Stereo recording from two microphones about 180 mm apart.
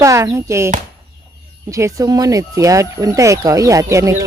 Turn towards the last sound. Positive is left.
turn(degrees=-15)  # may be behind; listen again after turning